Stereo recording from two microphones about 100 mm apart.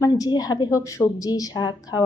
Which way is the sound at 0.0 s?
40° left (ahead or behind).